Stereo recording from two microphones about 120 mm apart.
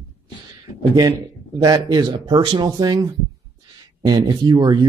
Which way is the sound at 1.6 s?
35° right (ahead or behind).